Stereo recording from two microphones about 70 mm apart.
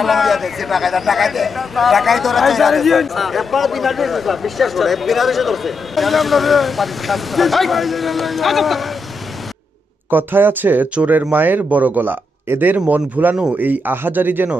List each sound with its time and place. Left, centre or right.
0.0 s speech: centre
10.1 s speech: right